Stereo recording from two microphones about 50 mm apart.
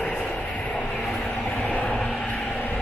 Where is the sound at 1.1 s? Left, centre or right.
Left.